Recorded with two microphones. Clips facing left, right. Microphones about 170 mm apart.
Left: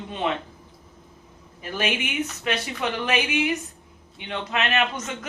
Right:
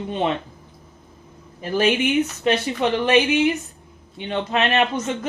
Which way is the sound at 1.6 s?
30° right (ahead or behind).